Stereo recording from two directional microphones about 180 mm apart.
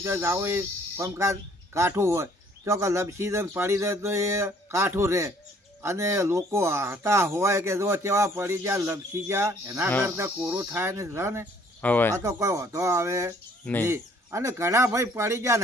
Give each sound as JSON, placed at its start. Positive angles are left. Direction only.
{"t": 0.0, "sound": "speech", "side_deg": -15}
{"t": 11.8, "sound": "speech", "side_deg": 10}
{"t": 12.1, "sound": "speech", "side_deg": -15}